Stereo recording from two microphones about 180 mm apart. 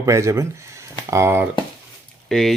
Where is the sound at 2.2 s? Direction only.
Centre (ahead or behind).